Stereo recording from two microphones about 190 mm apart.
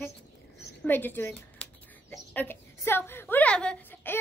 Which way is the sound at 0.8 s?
10° left (ahead or behind).